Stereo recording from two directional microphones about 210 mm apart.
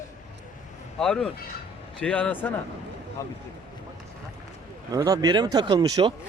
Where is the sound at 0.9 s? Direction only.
Centre (ahead or behind).